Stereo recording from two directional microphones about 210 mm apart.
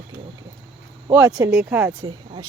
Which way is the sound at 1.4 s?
10° right (ahead or behind).